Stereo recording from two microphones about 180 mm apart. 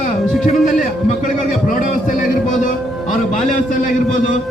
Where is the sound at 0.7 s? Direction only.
45° left (ahead or behind).